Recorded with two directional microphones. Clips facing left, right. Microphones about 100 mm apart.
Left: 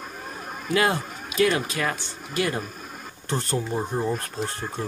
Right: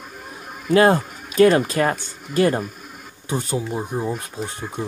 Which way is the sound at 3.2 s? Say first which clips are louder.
Right 2 dB; 10° right (ahead or behind).